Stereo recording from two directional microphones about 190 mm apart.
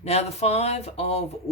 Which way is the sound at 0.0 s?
35° left (ahead or behind).